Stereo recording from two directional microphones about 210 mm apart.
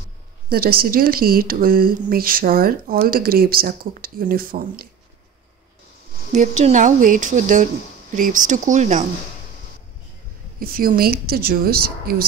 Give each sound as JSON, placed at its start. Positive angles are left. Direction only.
{"t": 0.5, "sound": "speech", "side_deg": -45}
{"t": 6.6, "sound": "speech", "side_deg": -35}
{"t": 10.6, "sound": "speech", "side_deg": -45}